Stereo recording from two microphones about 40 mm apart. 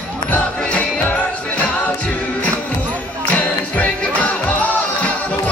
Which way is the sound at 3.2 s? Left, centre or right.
Left.